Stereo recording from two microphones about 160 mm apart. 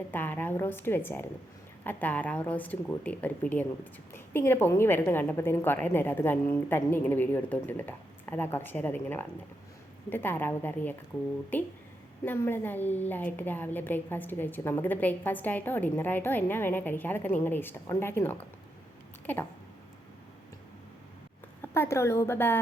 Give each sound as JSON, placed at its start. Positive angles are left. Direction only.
{"t": 0.1, "sound": "a woman's voice", "side_deg": 10}
{"t": 12.2, "sound": "a woman's voice", "side_deg": 15}
{"t": 19.2, "sound": "a sound", "side_deg": 10}
{"t": 21.6, "sound": "a woman's voice", "side_deg": 15}